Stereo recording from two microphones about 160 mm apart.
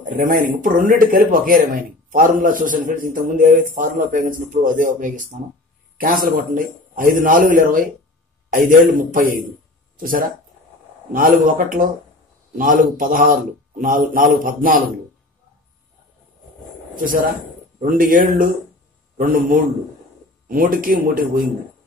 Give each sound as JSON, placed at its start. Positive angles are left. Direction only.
{"t": 0.0, "sound": "speech", "side_deg": -55}
{"t": 16.9, "sound": "speech", "side_deg": -60}